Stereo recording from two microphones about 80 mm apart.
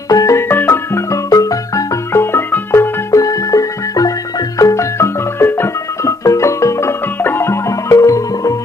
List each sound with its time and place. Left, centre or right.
0.1 s music: left
0.4 s music: left
1.1 s music: left
2.1 s music: left
3.1 s music: left
4.6 s marimba: left
6.0 s music: left
7.9 s music: left